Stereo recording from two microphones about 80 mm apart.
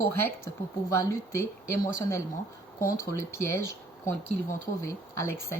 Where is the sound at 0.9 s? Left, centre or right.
Left.